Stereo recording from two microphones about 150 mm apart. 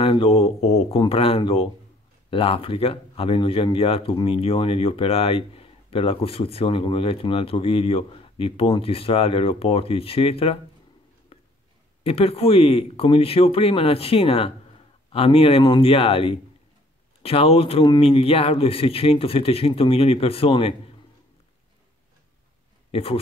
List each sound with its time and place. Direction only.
0.0 s speech: 35° left (ahead or behind)
11.3 s a sound: 40° left (ahead or behind)
12.0 s speech: 40° left (ahead or behind)
22.8 s speech: 40° left (ahead or behind)